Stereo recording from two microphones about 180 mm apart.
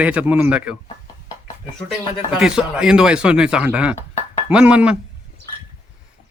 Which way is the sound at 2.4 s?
5° right (ahead or behind).